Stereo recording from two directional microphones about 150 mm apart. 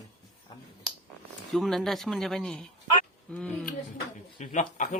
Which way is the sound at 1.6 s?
Centre (ahead or behind).